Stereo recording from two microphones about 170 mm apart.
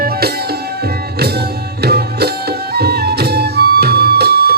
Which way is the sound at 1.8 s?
70° right (ahead or behind).